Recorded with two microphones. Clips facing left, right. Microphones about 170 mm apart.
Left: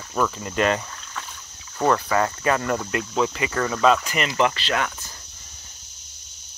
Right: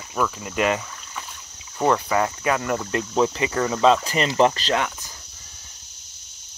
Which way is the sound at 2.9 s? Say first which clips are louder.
Right 2 dB; 30° right (ahead or behind).